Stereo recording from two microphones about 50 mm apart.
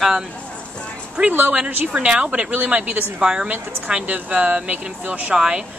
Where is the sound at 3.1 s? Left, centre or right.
Centre.